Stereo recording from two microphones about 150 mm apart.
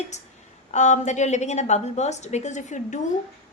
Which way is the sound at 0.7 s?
50° left (ahead or behind).